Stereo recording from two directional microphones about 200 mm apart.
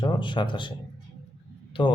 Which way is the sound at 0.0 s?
25° left (ahead or behind).